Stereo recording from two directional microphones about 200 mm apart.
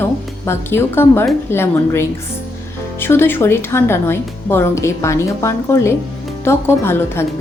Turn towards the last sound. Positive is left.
turn(degrees=10)  # may be behind; listen again after turning